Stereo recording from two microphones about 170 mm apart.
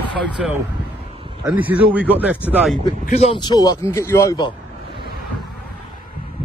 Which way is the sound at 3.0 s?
40° left (ahead or behind).